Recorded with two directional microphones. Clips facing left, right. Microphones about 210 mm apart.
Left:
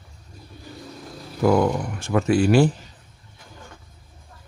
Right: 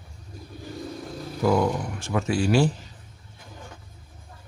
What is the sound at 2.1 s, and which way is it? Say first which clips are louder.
Speech: left 5 dB; 55° left (ahead or behind).